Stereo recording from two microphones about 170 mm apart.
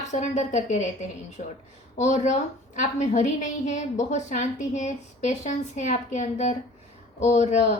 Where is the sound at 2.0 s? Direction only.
45° left (ahead or behind).